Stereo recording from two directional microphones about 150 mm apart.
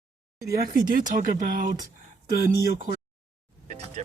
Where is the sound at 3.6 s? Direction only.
45° right (ahead or behind).